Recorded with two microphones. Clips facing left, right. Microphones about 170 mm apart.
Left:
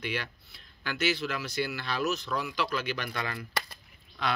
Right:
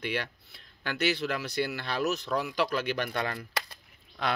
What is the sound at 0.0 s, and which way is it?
Speech, 55° right (ahead or behind).